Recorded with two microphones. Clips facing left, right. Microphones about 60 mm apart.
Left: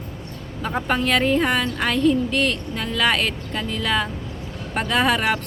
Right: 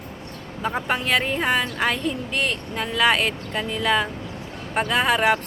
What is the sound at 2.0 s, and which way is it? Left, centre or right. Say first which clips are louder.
Speech: left 7 dB; centre.